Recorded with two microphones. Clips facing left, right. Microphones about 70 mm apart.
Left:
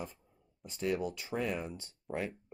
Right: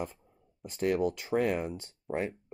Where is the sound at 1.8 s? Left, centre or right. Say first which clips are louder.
Right 4 dB; right.